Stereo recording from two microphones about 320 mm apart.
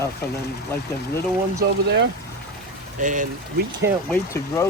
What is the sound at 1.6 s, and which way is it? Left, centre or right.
Speech, right.